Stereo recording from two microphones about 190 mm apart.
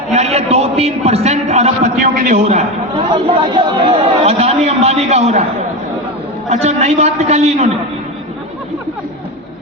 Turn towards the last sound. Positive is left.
turn(degrees=-35)  # may be behind; listen again after turning